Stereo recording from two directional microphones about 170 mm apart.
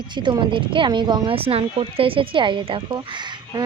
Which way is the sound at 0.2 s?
30° right (ahead or behind).